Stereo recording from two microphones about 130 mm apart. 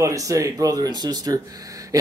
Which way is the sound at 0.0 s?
25° right (ahead or behind).